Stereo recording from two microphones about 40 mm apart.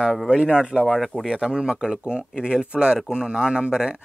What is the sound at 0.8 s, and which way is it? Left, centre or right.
Speech, centre.